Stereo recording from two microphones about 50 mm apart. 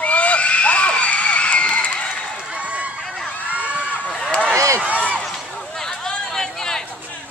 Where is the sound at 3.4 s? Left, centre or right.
Right.